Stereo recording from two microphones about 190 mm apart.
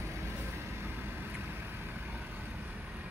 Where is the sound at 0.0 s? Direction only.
15° right (ahead or behind).